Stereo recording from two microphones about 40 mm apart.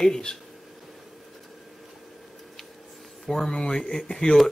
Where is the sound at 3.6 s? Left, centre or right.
Left.